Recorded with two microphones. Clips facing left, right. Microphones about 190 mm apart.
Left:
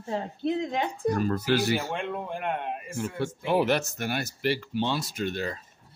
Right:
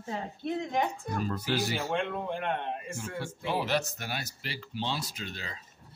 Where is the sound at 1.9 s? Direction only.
10° left (ahead or behind).